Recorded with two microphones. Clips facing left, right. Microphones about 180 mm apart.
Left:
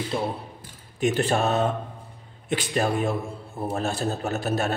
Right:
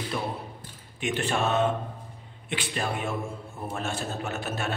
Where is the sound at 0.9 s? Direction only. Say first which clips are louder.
Left 5 dB; 40° left (ahead or behind).